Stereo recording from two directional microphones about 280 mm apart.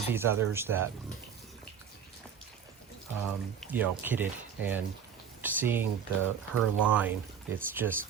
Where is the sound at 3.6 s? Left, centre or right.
Centre.